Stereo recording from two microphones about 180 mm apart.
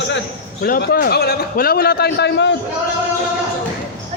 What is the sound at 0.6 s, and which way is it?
A man's voice, 60° left (ahead or behind).